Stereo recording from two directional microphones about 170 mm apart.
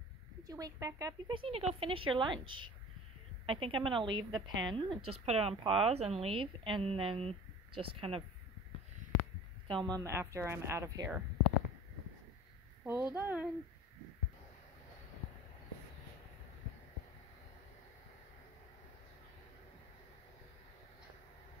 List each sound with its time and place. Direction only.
0.4 s a woman's voice: 20° right (ahead or behind)
9.8 s a woman's voice: 20° right (ahead or behind)
12.8 s a woman's voice: 10° right (ahead or behind)